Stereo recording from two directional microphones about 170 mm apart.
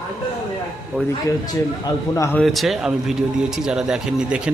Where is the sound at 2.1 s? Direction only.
15° left (ahead or behind).